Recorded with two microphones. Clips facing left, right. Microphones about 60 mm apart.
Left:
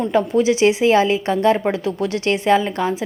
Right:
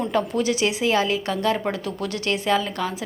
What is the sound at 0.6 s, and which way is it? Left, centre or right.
A woman's voice, left.